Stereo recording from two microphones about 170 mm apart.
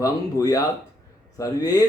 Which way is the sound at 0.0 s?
20° left (ahead or behind).